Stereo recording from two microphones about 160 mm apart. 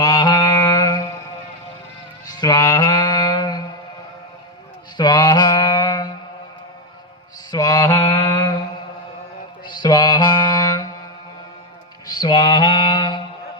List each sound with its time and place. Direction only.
0.0 s mantra: 25° left (ahead or behind)
2.2 s mantra: 25° left (ahead or behind)
4.9 s mantra: 25° left (ahead or behind)
7.5 s mantra: 20° left (ahead or behind)
9.6 s music: 25° left (ahead or behind)
12.0 s a sound: 25° left (ahead or behind)